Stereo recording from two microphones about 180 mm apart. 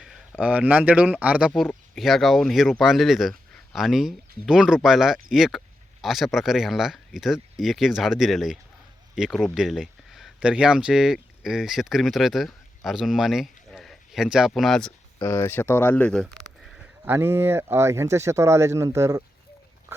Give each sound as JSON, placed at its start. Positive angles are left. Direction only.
{"t": 0.0, "sound": "speech", "side_deg": -5}
{"t": 17.1, "sound": "speech", "side_deg": -15}
{"t": 19.9, "sound": "a sound", "side_deg": -15}